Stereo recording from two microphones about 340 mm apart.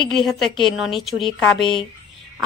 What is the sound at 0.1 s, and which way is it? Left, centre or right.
A woman's voice, centre.